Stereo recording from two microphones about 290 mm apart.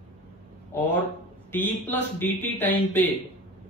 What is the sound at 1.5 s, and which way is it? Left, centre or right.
Speech, centre.